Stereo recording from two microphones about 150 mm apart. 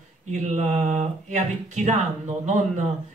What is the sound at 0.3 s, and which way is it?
Speech, 50° right (ahead or behind).